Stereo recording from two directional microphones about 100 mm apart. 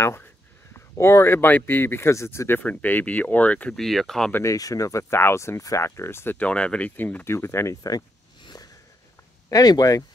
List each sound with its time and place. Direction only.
0.0 s speech: 25° left (ahead or behind)
3.7 s speech: centre (ahead or behind)
4.3 s speech: 30° left (ahead or behind)
8.5 s a sound: 35° left (ahead or behind)
9.5 s speech: 40° left (ahead or behind)